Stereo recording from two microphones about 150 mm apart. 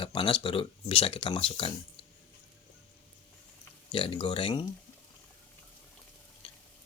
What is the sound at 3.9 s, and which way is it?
Speech, 35° left (ahead or behind).